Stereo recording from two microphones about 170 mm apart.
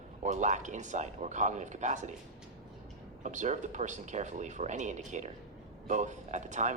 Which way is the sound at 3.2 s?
45° right (ahead or behind).